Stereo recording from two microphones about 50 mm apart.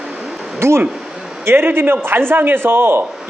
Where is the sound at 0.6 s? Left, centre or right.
Right.